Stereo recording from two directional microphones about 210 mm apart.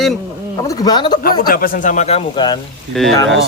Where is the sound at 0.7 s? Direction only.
20° left (ahead or behind).